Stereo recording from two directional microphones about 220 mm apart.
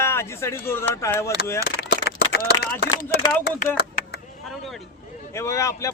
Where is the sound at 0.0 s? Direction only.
10° left (ahead or behind).